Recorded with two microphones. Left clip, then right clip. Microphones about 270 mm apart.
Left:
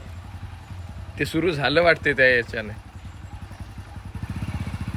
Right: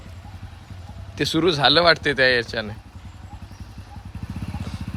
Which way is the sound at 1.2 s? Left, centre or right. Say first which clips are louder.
Right 4 dB; centre.